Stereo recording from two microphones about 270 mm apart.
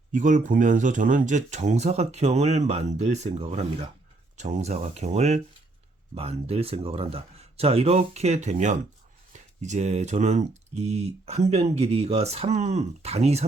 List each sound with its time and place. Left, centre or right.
0.1 s speech: right